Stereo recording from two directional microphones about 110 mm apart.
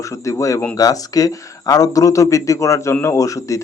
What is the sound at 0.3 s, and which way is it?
Speech, 30° left (ahead or behind).